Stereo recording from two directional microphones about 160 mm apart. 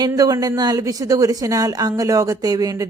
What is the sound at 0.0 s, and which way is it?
A woman's voice, 25° right (ahead or behind).